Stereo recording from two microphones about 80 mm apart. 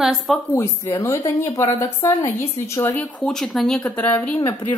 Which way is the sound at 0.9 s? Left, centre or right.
Left.